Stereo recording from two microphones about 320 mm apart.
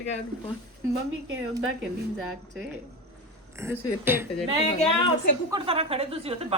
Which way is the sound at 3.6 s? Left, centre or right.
Centre.